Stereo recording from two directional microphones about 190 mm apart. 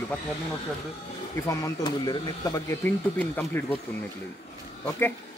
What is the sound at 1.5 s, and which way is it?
Speech, 20° left (ahead or behind).